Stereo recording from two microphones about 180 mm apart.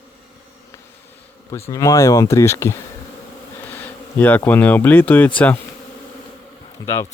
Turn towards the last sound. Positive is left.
turn(degrees=15)  # may be behind; listen again after turning